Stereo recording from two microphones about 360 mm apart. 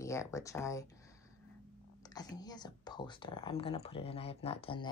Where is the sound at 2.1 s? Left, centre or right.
Centre.